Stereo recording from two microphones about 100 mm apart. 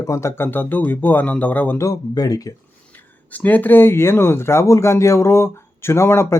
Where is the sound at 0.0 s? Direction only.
30° left (ahead or behind).